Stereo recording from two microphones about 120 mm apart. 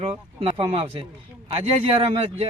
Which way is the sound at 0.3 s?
50° right (ahead or behind).